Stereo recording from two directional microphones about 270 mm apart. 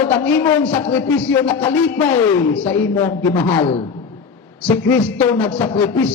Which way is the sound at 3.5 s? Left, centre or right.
Left.